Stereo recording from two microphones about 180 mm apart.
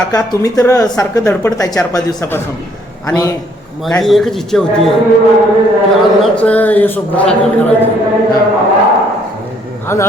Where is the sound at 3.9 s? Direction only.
Centre (ahead or behind).